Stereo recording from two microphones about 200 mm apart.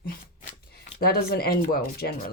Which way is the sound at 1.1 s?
50° left (ahead or behind).